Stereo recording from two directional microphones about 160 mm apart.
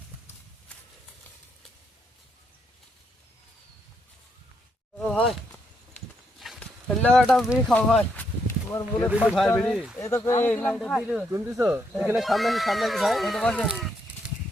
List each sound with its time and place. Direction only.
0.7 s a sound: 5° left (ahead or behind)
4.9 s a sound: 5° left (ahead or behind)
6.4 s a sound: 5° left (ahead or behind)
7.2 s speech: centre (ahead or behind); by 9.0 s 15° left (ahead or behind)
9.0 s speech: 10° right (ahead or behind)
9.5 s speech: 5° left (ahead or behind)
10.0 s speech: 20° left (ahead or behind); by 11.3 s centre (ahead or behind)
11.3 s speech: 20° right (ahead or behind)
12.1 s speech: centre (ahead or behind)